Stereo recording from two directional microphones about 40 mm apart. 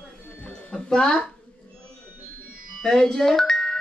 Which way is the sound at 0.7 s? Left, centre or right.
Centre.